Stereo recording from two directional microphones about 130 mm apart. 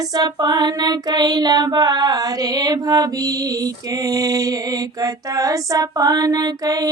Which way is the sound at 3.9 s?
30° right (ahead or behind).